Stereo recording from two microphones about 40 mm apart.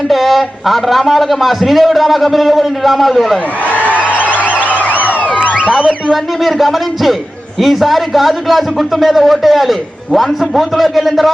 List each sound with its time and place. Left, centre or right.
0.1 s speech: centre
3.7 s a sound: left
4.4 s emergency vehicle: right
6.4 s speech: centre